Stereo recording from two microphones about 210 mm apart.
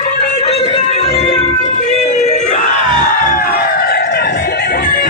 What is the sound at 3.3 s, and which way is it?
Music, 45° left (ahead or behind).